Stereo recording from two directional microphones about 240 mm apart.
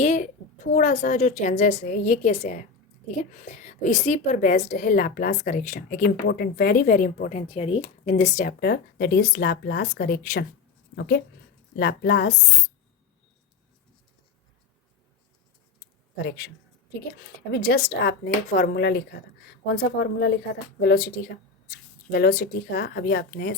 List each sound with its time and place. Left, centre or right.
0.0 s a sound: left
0.8 s a woman's voice: left
16.1 s speech: left
17.5 s speech: left